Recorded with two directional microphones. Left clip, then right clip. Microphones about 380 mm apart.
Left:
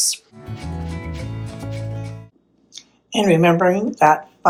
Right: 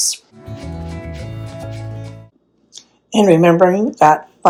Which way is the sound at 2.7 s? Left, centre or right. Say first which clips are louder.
Right 4 dB; centre.